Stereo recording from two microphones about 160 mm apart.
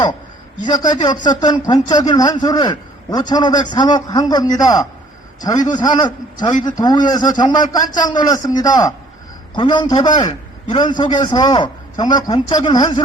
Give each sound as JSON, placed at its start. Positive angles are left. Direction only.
{"t": 0.6, "sound": "a man's voice", "side_deg": 25}